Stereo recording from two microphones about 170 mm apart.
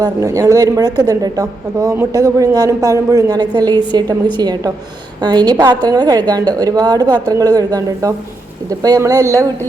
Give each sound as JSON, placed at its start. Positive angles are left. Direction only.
{"t": 0.0, "sound": "a woman's voice", "side_deg": -20}